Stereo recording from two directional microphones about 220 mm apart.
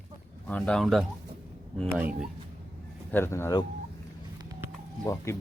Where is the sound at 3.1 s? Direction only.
10° left (ahead or behind).